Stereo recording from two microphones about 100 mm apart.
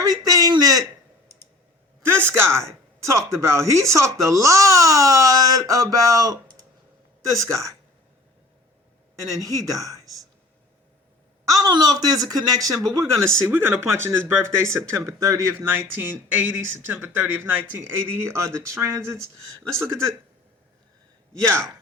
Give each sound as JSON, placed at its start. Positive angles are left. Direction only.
{"t": 0.3, "sound": "a sound", "side_deg": -40}
{"t": 2.0, "sound": "speech", "side_deg": -25}
{"t": 9.3, "sound": "speech", "side_deg": -35}
{"t": 11.4, "sound": "speech", "side_deg": -40}